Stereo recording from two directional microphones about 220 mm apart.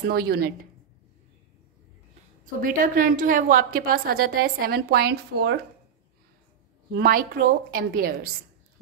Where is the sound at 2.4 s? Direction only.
40° right (ahead or behind).